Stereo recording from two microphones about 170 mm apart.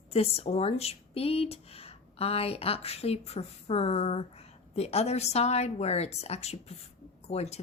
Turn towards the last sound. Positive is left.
turn(degrees=40)  # may be behind; listen again after turning